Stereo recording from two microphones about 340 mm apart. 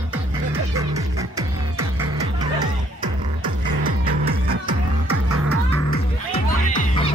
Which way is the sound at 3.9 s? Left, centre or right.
Centre.